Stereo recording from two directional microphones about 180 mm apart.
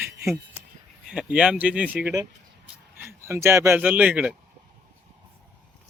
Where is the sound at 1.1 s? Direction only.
5° right (ahead or behind).